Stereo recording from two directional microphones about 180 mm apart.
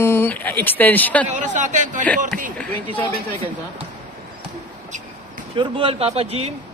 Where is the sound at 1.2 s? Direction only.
45° right (ahead or behind).